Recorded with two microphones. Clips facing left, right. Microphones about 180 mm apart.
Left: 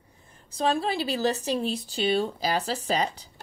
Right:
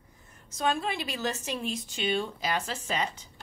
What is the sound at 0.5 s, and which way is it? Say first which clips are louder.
Speech: left 4 dB; 30° left (ahead or behind).